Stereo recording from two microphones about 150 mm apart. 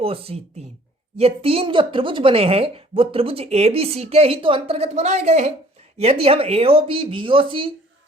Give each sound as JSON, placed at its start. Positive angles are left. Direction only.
{"t": 0.0, "sound": "speech", "side_deg": -40}